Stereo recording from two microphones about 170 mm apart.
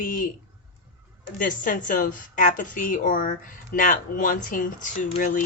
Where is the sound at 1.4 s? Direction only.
50° left (ahead or behind).